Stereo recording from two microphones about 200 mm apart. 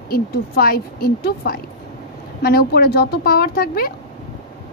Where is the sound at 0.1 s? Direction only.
50° left (ahead or behind).